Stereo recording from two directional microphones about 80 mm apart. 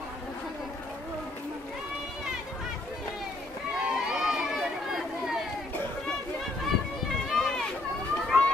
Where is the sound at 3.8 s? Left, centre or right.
Centre.